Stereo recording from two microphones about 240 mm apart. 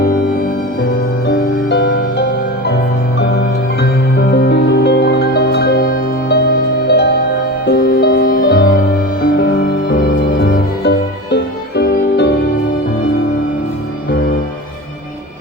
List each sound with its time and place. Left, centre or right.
1.3 s music: left
4.3 s music: left
10.4 s music: left